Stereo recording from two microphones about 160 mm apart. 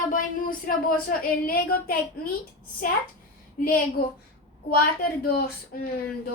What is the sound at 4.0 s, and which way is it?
A woman's voice, 65° left (ahead or behind).